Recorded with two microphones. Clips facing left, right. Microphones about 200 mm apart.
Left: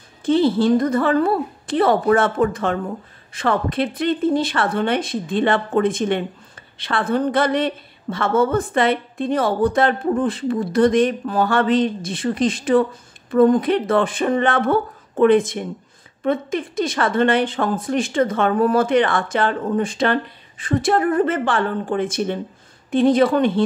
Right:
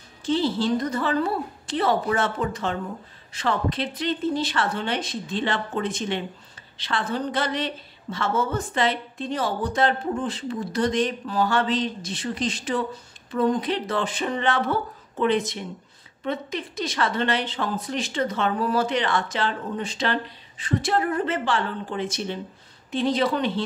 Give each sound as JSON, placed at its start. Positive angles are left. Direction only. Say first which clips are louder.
{"t": 0.2, "sound": "a woman's voice", "louder": "left 7 dB", "side_deg": 55}